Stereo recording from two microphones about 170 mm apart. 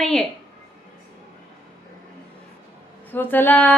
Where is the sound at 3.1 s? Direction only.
10° left (ahead or behind).